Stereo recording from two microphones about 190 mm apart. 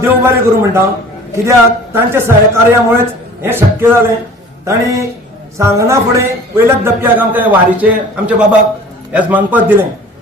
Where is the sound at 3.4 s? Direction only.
10° right (ahead or behind).